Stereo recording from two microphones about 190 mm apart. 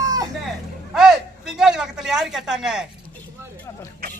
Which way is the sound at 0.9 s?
5° right (ahead or behind).